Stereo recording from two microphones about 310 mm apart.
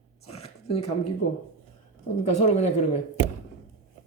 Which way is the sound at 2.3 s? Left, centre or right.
Left.